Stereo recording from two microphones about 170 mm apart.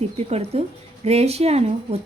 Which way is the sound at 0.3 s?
40° right (ahead or behind).